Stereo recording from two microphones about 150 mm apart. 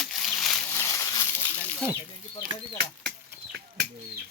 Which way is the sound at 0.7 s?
20° left (ahead or behind).